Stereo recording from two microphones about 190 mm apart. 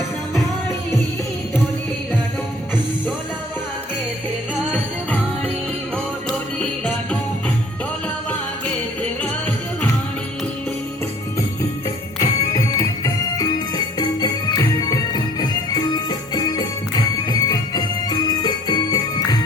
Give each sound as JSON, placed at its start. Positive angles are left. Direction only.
{"t": 6.6, "sound": "music", "side_deg": 5}
{"t": 12.2, "sound": "music", "side_deg": 15}